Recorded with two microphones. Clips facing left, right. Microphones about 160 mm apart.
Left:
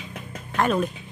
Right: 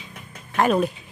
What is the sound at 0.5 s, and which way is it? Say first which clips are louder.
Speech: right 3 dB; 5° right (ahead or behind).